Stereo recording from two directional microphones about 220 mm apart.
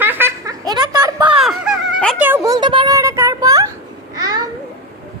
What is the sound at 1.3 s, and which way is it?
Speech, centre (ahead or behind).